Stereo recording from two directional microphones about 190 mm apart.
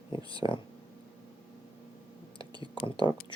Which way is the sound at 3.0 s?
15° right (ahead or behind).